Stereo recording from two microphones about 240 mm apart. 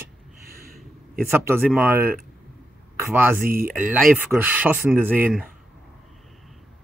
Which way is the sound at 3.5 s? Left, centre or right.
Right.